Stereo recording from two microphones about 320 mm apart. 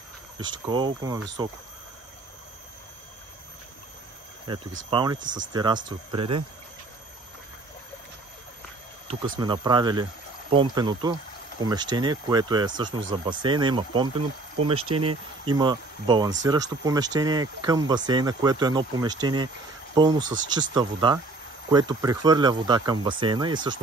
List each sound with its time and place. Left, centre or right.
0.4 s speech: centre
4.5 s speech: centre
9.0 s speech: centre